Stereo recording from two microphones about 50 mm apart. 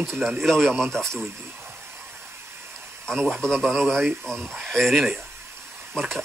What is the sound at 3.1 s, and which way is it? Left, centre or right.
Speech, centre.